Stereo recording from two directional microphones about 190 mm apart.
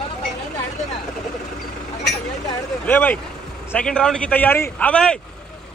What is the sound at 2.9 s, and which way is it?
Speech, 10° left (ahead or behind).